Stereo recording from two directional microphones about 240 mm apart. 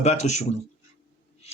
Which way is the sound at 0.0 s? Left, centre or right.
Left.